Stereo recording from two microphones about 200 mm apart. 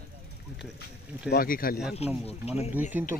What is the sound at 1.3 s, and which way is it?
Speech, 45° left (ahead or behind).